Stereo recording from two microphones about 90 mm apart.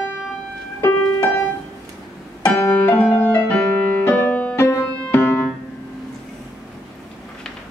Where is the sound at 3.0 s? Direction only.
15° left (ahead or behind).